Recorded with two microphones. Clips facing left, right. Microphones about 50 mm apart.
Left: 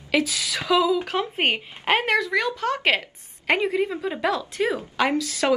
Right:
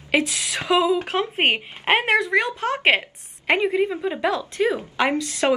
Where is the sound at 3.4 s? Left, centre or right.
Centre.